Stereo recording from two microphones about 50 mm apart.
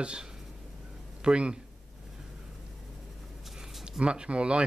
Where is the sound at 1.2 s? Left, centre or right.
Centre.